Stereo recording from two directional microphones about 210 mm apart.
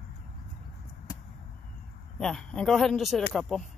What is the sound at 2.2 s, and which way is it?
Speech, 5° left (ahead or behind).